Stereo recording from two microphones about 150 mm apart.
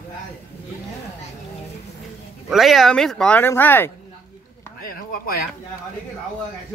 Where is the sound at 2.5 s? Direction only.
Centre (ahead or behind).